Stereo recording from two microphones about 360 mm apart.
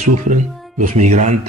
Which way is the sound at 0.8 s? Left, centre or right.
Right.